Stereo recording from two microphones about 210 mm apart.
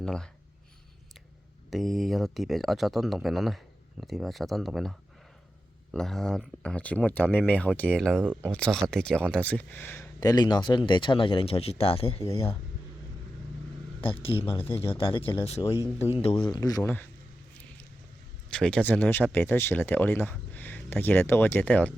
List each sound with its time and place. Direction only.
0.0 s speech: 5° left (ahead or behind)
1.7 s speech: centre (ahead or behind)
8.2 s speech: 5° right (ahead or behind)
8.4 s speech: 5° left (ahead or behind); by 12.2 s 25° left (ahead or behind)
14.0 s speech: 25° left (ahead or behind)
15.6 s speech: 15° left (ahead or behind)
16.0 s speech: 25° left (ahead or behind); by 17.1 s 10° left (ahead or behind)
18.5 s speech: 5° left (ahead or behind)